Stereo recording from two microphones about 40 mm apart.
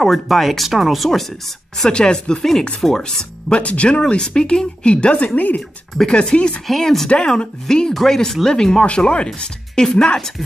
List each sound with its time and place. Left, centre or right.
0.0 s speech: centre
1.9 s speech: left
3.5 s speech: left
6.0 s speech: left
6.8 s speech: centre
7.2 s speech: centre
7.9 s speech: centre
8.8 s speech: left